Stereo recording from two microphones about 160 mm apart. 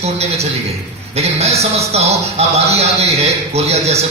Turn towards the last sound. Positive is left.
turn(degrees=-40)  # may be behind; listen again after turning